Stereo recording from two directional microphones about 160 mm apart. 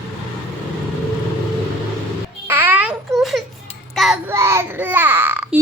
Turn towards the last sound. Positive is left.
turn(degrees=-10)  # may be behind; listen again after turning